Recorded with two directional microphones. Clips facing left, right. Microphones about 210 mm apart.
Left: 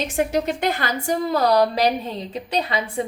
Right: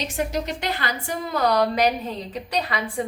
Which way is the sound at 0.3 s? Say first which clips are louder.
Left 5 dB; 50° left (ahead or behind).